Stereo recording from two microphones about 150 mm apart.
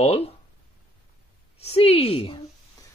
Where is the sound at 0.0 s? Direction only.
45° left (ahead or behind).